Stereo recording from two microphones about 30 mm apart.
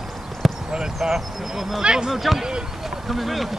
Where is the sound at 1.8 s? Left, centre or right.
Right.